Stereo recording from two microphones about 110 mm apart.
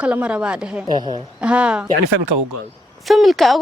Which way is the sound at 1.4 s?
10° right (ahead or behind).